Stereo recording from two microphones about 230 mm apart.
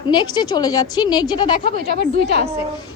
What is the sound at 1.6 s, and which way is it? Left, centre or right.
Speech, right.